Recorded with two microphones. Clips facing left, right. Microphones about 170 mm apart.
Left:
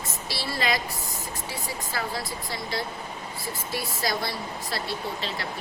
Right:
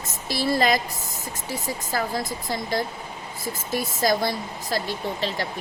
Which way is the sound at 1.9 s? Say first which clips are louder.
Right 6 dB; 45° right (ahead or behind).